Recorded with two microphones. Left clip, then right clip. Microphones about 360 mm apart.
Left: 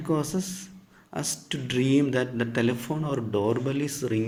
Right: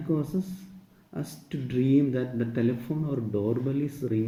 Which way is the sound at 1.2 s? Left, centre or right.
Left.